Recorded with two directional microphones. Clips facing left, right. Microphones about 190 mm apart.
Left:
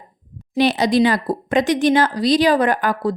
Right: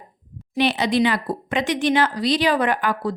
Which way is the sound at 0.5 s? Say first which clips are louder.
Left 4 dB; 40° left (ahead or behind).